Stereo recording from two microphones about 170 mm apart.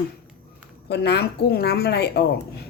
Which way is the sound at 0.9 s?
75° left (ahead or behind).